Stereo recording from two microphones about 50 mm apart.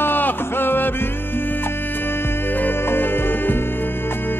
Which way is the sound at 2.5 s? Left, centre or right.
Left.